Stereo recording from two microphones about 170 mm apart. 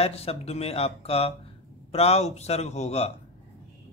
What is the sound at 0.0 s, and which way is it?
A man's voice, 35° left (ahead or behind).